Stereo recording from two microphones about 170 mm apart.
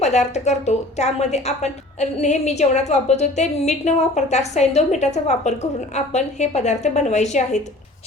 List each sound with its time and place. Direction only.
0.0 s a woman's voice: 40° left (ahead or behind)